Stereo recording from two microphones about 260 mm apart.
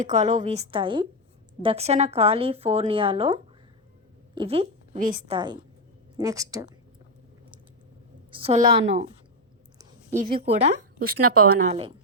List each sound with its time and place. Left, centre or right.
0.0 s a woman's voice: right
5.3 s a woman's voice: centre
8.3 s a woman's voice: right
10.1 s speech: right
11.0 s speech: right